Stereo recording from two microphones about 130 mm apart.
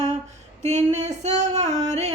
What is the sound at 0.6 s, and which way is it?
Speech, 65° right (ahead or behind).